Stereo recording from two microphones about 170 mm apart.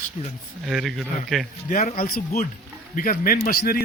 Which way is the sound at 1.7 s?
45° left (ahead or behind).